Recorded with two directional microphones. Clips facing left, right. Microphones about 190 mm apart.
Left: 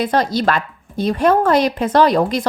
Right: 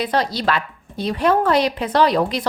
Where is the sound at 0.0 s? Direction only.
45° left (ahead or behind).